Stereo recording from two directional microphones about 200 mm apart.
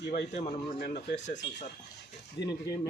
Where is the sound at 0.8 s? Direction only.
60° left (ahead or behind).